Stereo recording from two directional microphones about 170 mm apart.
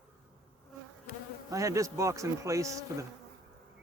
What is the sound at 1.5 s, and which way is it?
A man's voice, 20° right (ahead or behind).